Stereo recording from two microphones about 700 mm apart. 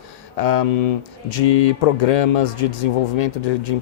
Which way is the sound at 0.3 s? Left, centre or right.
Left.